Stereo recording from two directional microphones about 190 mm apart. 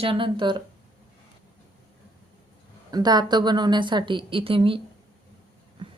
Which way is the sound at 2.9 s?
20° right (ahead or behind).